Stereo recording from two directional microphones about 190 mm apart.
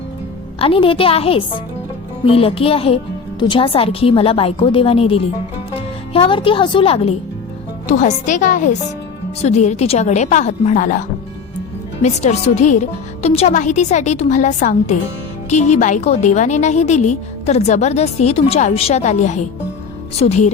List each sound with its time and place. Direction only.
0.6 s a woman's voice: 30° left (ahead or behind)
12.0 s a woman's voice: 35° left (ahead or behind)